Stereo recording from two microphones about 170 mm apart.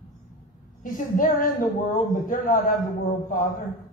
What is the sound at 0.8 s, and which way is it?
Speech, 50° left (ahead or behind).